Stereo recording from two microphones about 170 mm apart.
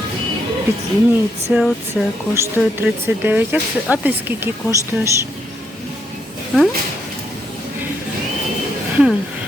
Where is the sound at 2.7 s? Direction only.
10° right (ahead or behind).